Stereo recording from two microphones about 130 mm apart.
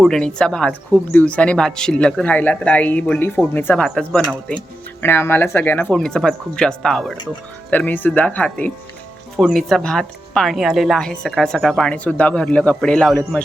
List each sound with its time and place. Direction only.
0.0 s a woman's voice: 5° left (ahead or behind)
5.0 s speech: 15° left (ahead or behind)
5.9 s a woman's voice: 5° left (ahead or behind)